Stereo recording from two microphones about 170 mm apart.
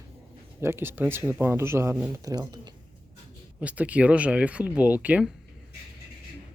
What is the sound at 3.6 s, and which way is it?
Speech, 10° right (ahead or behind).